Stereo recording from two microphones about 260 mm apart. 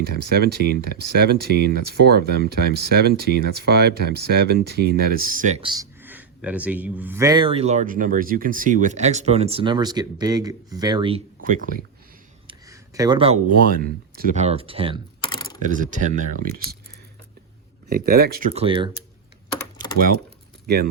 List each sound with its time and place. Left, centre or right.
0.0 s speech: right
12.5 s speech: centre; by 16.7 s right
17.8 s speech: right
19.8 s typing: right
20.7 s speech: right